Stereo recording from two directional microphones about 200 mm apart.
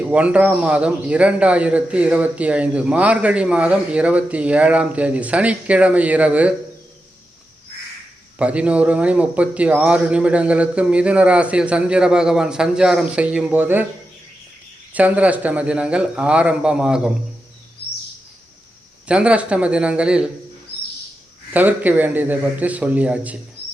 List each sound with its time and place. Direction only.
0.0 s a man's voice: 5° right (ahead or behind)
8.4 s a man's voice: 5° right (ahead or behind)
14.9 s a man's voice: 5° right (ahead or behind)
17.8 s bird vocalization: 50° left (ahead or behind)
19.0 s a man's voice: 5° right (ahead or behind)
21.5 s a man's voice: 10° right (ahead or behind)